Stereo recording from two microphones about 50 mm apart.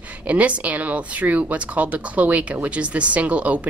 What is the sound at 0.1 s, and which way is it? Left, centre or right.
Speech, right.